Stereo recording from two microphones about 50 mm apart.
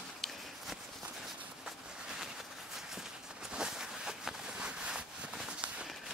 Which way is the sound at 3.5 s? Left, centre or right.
Centre.